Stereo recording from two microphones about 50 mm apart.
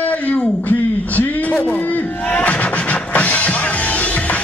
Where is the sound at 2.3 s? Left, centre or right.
Left.